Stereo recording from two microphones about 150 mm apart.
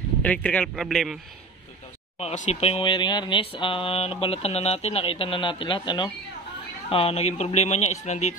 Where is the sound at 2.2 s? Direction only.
45° left (ahead or behind).